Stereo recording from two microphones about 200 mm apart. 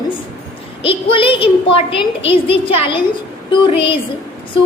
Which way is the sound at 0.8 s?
25° left (ahead or behind).